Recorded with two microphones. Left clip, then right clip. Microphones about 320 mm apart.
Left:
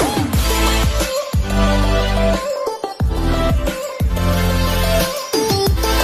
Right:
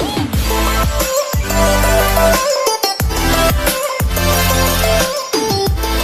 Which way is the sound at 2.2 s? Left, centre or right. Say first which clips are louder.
Right 6 dB; right.